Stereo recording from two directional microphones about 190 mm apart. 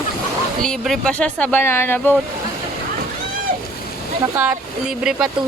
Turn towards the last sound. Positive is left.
turn(degrees=-5)  # may be behind; listen again after turning